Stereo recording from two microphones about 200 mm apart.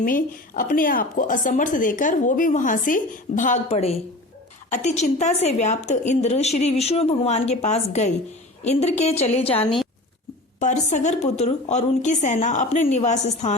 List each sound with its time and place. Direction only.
0.0 s speech: 45° left (ahead or behind)